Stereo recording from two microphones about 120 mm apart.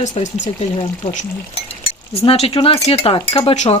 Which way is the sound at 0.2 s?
90° left.